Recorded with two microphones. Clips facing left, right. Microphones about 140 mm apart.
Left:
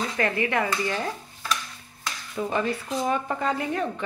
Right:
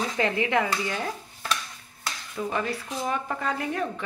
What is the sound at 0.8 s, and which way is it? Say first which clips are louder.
Speech: left 2 dB; centre (ahead or behind).